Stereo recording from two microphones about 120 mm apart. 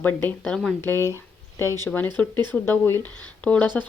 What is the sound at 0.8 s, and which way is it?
A woman's voice, 20° left (ahead or behind).